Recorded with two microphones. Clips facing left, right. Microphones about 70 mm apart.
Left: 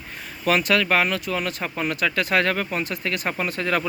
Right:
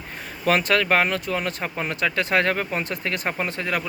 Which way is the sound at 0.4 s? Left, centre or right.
Right.